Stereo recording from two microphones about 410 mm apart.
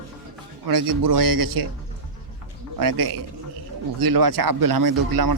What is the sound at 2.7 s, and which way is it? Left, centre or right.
A man's voice, right.